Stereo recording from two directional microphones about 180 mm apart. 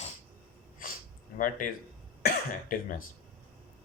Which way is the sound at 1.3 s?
50° left (ahead or behind).